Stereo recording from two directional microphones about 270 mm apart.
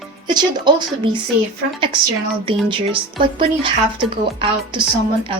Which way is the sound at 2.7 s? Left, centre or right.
Centre.